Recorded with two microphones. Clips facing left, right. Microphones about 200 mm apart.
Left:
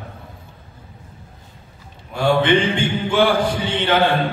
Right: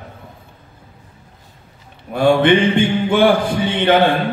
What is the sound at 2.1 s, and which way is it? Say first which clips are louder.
A man's voice: right 4 dB; 55° right (ahead or behind).